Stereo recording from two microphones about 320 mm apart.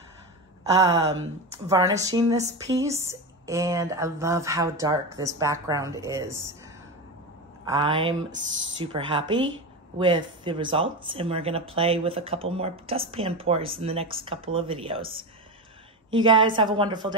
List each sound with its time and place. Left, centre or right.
0.9 s speech: right
1.7 s speech: centre
7.6 s speech: centre